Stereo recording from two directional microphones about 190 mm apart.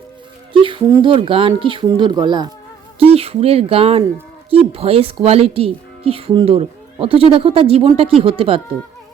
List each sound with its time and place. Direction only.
0.5 s speech: 25° right (ahead or behind)
3.0 s speech: 30° right (ahead or behind)